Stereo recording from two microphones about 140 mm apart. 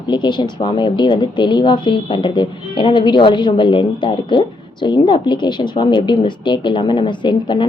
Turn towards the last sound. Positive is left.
turn(degrees=35)  # may be behind; listen again after turning